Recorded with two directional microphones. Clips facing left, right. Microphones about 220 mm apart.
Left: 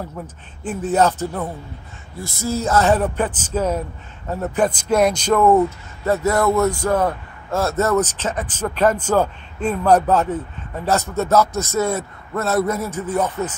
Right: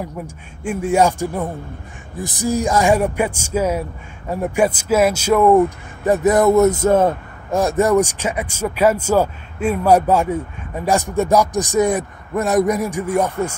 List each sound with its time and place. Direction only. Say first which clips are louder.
0.7 s speech: right 2 dB; 10° right (ahead or behind)